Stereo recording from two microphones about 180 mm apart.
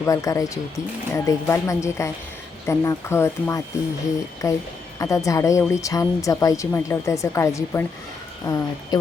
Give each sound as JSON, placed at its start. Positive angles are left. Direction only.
{"t": 0.0, "sound": "a woman's voice", "side_deg": 20}